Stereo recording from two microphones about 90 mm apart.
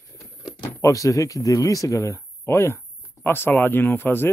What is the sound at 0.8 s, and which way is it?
Speech, 40° left (ahead or behind).